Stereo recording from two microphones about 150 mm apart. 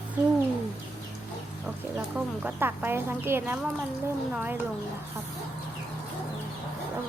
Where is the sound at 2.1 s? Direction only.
10° right (ahead or behind).